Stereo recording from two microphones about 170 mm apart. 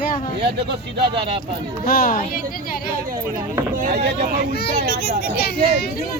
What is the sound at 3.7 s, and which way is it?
Speech, 55° right (ahead or behind).